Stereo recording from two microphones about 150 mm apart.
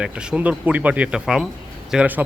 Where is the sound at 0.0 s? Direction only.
5° right (ahead or behind).